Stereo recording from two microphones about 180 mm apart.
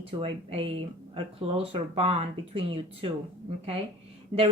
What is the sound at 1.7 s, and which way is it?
A woman's voice, 30° right (ahead or behind).